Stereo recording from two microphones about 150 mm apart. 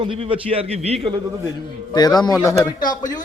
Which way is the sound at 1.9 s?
25° left (ahead or behind).